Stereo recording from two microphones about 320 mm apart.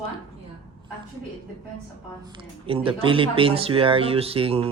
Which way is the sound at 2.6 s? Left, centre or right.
Centre.